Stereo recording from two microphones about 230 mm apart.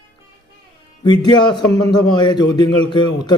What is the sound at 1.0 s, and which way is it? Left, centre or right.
A man's voice, centre.